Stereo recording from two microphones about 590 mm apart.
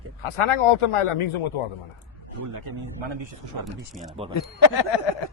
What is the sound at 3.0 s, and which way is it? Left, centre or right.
Speech, right.